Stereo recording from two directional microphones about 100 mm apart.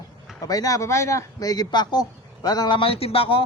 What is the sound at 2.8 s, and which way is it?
Speech, 75° left (ahead or behind).